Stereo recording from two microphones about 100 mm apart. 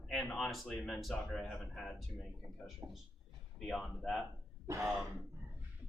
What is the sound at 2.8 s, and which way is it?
Speech, 20° right (ahead or behind).